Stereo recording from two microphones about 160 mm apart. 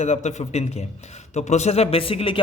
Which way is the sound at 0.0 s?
45° left (ahead or behind).